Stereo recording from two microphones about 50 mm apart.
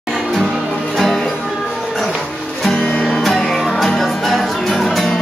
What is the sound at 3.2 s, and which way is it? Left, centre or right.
Music, centre.